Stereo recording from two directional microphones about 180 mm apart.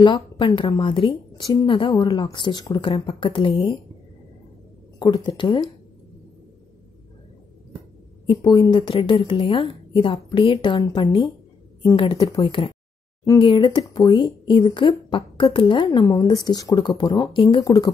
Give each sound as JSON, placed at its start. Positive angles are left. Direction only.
{"t": 0.0, "sound": "speech", "side_deg": 25}
{"t": 4.9, "sound": "speech", "side_deg": 25}
{"t": 8.3, "sound": "speech", "side_deg": 25}